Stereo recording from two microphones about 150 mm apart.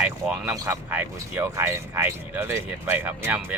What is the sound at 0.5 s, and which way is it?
Speech, 15° right (ahead or behind).